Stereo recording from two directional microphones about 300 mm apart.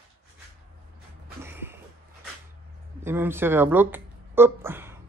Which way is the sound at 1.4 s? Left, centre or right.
Centre.